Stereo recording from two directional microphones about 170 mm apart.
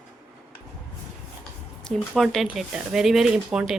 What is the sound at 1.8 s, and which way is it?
Speech, centre (ahead or behind).